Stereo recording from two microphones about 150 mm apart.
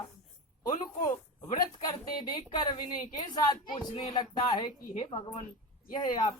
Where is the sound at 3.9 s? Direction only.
30° left (ahead or behind).